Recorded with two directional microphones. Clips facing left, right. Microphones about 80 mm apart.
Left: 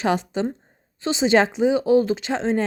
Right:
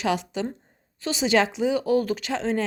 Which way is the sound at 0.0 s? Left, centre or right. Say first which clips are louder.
Left 4 dB; left.